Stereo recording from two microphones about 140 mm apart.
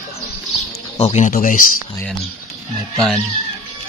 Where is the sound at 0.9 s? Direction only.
50° left (ahead or behind).